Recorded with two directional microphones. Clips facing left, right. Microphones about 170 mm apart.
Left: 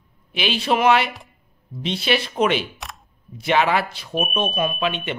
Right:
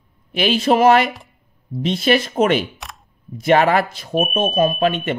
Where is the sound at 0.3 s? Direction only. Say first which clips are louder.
Right 5 dB; 45° right (ahead or behind).